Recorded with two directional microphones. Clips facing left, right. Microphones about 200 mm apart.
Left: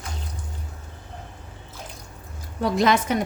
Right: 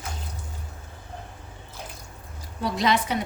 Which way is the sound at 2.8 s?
50° left (ahead or behind).